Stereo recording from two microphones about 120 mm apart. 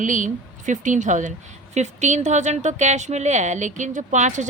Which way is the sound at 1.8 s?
75° right (ahead or behind).